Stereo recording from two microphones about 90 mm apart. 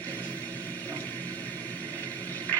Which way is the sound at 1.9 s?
20° left (ahead or behind).